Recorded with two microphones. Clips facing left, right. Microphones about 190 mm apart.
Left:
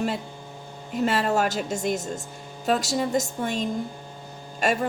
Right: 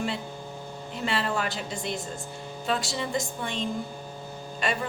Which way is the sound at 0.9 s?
45° left (ahead or behind).